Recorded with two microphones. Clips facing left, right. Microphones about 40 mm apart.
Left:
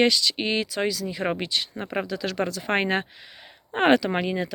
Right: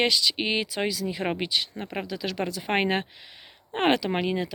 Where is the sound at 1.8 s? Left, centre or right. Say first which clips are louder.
Left 4 dB; centre.